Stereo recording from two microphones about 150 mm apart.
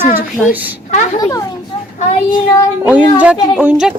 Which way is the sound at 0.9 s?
50° left (ahead or behind).